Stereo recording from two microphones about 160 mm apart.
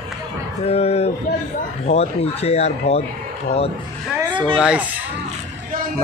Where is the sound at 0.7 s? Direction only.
40° left (ahead or behind).